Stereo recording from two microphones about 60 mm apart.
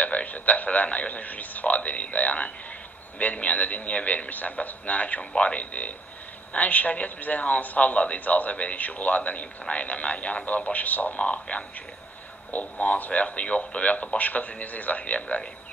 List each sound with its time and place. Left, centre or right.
0.0 s a man's voice: left